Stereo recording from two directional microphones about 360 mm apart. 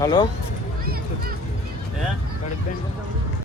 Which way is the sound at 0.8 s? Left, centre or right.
Right.